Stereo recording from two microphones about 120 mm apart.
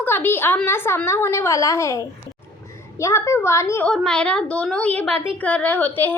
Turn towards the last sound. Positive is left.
turn(degrees=15)  # may be behind; listen again after turning